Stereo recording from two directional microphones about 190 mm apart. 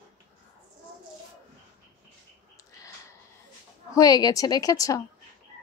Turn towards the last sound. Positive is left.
turn(degrees=20)  # may be behind; listen again after turning